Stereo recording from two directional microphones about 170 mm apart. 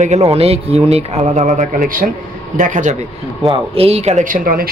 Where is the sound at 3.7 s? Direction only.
35° right (ahead or behind); by 4.7 s 55° right (ahead or behind).